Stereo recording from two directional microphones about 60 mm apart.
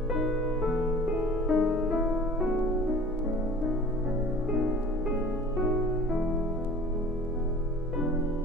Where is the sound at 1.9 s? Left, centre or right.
Centre.